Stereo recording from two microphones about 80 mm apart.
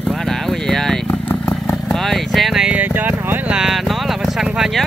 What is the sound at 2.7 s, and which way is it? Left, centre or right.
Speech, right.